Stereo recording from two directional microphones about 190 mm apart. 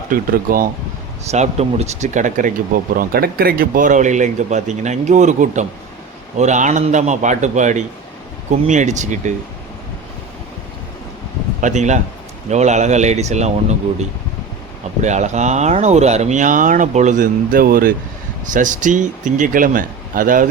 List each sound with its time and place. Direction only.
0.1 s speech: 45° right (ahead or behind)
1.2 s speech: 35° right (ahead or behind)
11.6 s speech: 40° right (ahead or behind)
15.0 s speech: 40° right (ahead or behind)